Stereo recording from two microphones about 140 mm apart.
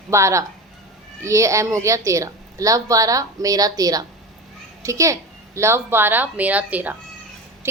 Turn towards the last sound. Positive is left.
turn(degrees=-10)  # may be behind; listen again after turning